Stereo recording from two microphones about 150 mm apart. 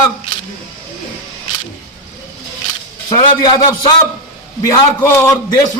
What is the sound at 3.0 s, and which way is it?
A man's voice, 25° left (ahead or behind).